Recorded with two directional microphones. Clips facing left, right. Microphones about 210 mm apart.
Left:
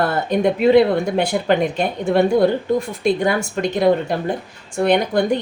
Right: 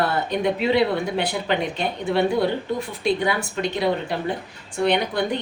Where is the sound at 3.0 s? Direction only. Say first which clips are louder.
Left 4 dB; 50° left (ahead or behind).